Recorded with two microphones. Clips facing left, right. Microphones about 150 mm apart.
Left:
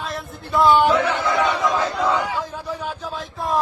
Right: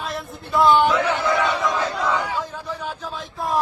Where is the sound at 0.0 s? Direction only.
Centre (ahead or behind).